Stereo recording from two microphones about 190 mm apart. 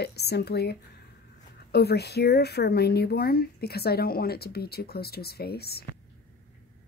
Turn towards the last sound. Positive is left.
turn(degrees=55)  # may be behind; listen again after turning